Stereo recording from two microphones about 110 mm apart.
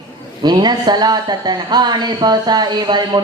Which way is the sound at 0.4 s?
40° right (ahead or behind).